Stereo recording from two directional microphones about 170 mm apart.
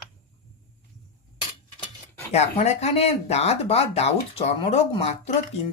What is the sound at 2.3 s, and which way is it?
Speech, 40° left (ahead or behind).